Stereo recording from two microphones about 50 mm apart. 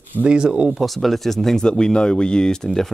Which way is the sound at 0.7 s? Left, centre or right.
Centre.